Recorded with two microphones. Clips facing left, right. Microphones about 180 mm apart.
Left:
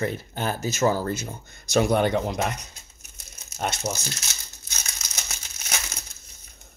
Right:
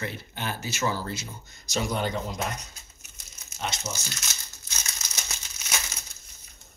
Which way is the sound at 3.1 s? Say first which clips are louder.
Left 6 dB; 50° left (ahead or behind).